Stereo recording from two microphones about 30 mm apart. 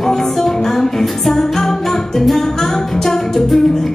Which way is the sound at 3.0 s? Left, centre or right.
Centre.